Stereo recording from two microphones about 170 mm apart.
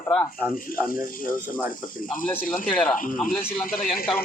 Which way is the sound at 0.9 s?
55° left (ahead or behind).